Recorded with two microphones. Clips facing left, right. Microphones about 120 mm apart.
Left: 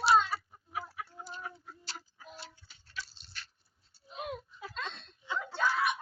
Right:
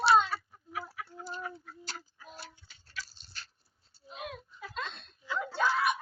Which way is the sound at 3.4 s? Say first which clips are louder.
Even; 35° right (ahead or behind).